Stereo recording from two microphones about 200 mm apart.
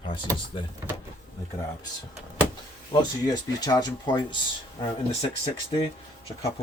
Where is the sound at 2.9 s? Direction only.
20° left (ahead or behind).